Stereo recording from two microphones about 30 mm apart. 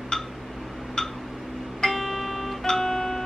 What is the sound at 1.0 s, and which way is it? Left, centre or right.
Tick, left.